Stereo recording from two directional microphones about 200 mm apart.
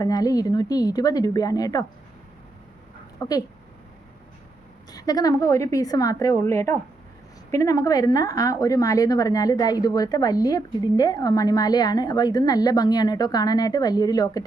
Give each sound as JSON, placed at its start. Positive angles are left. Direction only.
{"t": 0.0, "sound": "a woman's voice", "side_deg": 20}
{"t": 3.2, "sound": "speech", "side_deg": 20}
{"t": 4.9, "sound": "a woman's voice", "side_deg": 20}